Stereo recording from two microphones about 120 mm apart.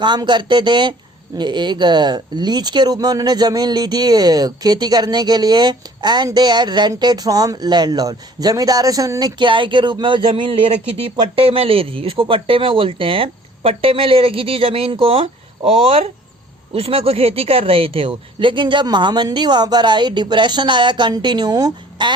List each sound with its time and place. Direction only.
0.0 s speech: 40° right (ahead or behind)